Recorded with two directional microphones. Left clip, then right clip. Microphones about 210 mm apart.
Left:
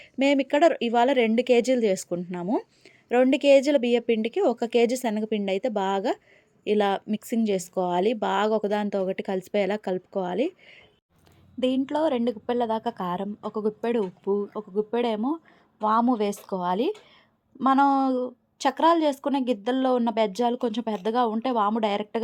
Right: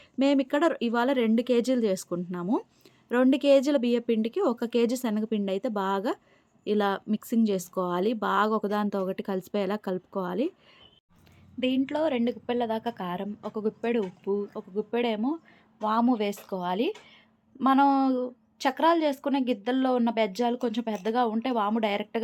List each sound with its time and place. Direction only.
0.0 s speech: 5° left (ahead or behind)
11.6 s a woman's voice: 25° left (ahead or behind)